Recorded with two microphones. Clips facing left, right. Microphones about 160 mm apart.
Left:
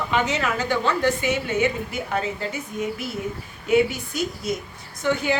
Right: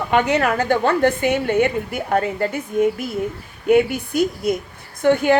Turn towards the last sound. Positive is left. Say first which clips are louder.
# right 7 dB
turn(degrees=-55)  # may be behind; listen again after turning